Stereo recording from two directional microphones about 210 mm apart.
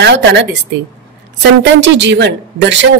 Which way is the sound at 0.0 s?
55° right (ahead or behind).